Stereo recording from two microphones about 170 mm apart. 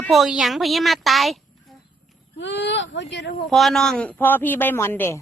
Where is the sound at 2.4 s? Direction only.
90° left.